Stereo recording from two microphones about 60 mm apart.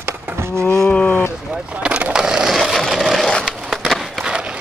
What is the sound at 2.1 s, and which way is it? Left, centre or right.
Wood, centre.